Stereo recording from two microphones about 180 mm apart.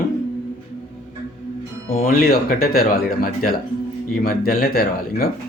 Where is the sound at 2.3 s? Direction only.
55° left (ahead or behind).